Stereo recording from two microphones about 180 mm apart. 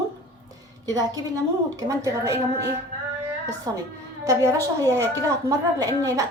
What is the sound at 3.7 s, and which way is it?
A woman's voice, 20° right (ahead or behind).